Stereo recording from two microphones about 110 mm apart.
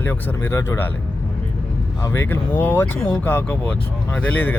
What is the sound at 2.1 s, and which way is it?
Speech, 20° left (ahead or behind).